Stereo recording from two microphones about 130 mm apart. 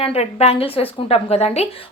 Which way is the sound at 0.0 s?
50° left (ahead or behind).